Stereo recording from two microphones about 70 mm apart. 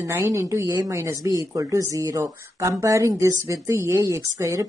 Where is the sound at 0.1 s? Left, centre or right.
Right.